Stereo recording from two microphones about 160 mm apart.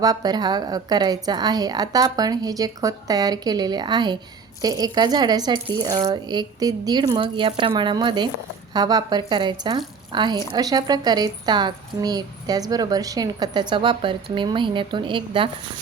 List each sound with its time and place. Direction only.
0.0 s a woman's voice: 25° right (ahead or behind)